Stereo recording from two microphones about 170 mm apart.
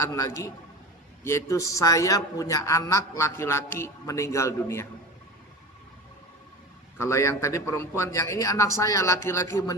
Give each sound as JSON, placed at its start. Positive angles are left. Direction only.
{"t": 0.1, "sound": "a man's voice", "side_deg": 20}
{"t": 7.0, "sound": "a man's voice", "side_deg": 15}